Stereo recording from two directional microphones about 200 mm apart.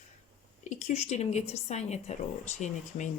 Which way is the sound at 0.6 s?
35° left (ahead or behind).